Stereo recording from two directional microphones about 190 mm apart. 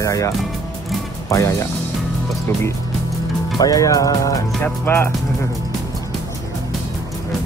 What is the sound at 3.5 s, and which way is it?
Speech, 20° left (ahead or behind).